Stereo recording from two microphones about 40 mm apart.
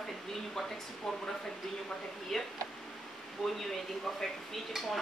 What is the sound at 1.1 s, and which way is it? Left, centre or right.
Speech, centre.